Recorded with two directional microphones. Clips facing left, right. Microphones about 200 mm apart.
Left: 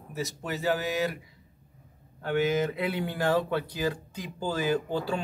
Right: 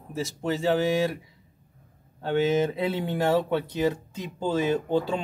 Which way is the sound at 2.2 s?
25° right (ahead or behind).